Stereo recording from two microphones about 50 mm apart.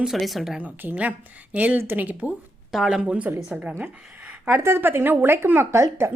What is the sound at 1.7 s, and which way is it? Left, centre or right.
Speech, right.